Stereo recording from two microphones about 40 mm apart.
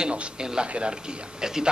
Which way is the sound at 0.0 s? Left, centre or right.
Right.